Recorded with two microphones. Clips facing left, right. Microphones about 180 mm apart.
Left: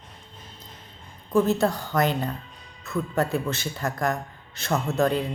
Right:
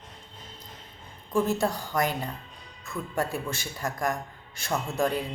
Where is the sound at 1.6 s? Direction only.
10° right (ahead or behind).